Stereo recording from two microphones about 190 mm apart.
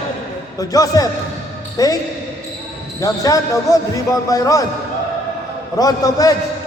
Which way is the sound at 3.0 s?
20° left (ahead or behind).